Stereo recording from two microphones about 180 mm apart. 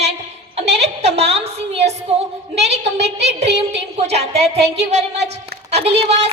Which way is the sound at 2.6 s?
35° right (ahead or behind).